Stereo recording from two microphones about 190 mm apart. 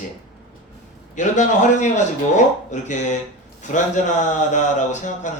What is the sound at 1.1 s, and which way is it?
Speech, 40° left (ahead or behind).